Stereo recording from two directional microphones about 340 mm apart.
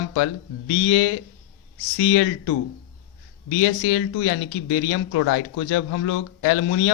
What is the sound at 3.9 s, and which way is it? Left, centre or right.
Speech, left.